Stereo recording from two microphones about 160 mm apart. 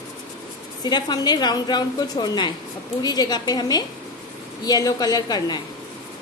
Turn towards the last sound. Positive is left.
turn(degrees=25)  # may be behind; listen again after turning